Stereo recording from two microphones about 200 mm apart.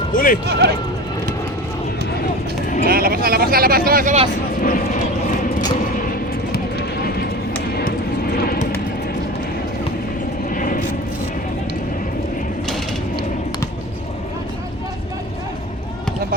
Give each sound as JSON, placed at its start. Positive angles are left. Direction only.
{"t": 0.1, "sound": "speech", "side_deg": 45}
{"t": 0.4, "sound": "speech", "side_deg": -55}
{"t": 2.8, "sound": "speech", "side_deg": -50}
{"t": 4.6, "sound": "vehicle", "side_deg": 40}
{"t": 5.8, "sound": "a sound", "side_deg": 45}
{"t": 7.8, "sound": "vehicle", "side_deg": 50}
{"t": 10.5, "sound": "a sound", "side_deg": 45}